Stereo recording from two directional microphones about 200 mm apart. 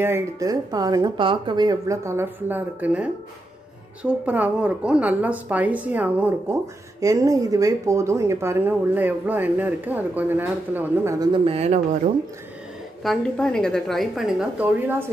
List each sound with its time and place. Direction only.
0.0 s a woman's voice: 15° right (ahead or behind); by 12.0 s 35° right (ahead or behind)
13.0 s a woman's voice: centre (ahead or behind)